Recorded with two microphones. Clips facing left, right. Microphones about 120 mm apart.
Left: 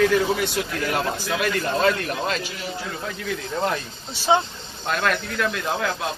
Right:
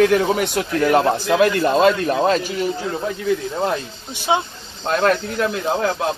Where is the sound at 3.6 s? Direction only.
15° right (ahead or behind).